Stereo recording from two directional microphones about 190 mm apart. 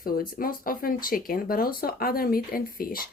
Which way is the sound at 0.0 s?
50° left (ahead or behind).